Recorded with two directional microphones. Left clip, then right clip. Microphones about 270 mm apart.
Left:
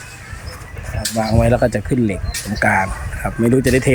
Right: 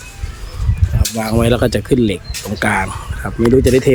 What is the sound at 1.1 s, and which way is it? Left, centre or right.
Speech, centre.